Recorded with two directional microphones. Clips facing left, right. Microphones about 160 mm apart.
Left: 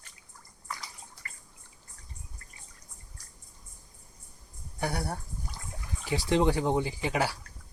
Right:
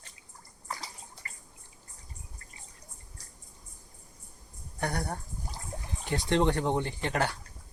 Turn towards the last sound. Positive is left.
turn(degrees=5)  # may be behind; listen again after turning